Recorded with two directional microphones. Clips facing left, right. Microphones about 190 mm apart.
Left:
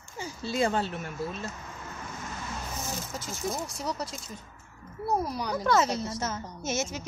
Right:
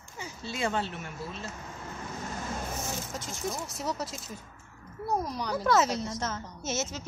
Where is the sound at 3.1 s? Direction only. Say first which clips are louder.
Left 4 dB; centre (ahead or behind).